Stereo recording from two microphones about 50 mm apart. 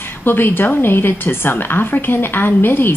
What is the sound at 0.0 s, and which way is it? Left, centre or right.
A woman's voice, left.